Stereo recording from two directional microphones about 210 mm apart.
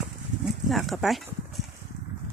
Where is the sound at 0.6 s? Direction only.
Centre (ahead or behind).